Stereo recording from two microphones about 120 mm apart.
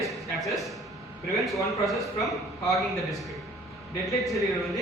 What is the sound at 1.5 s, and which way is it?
Speech, 25° left (ahead or behind).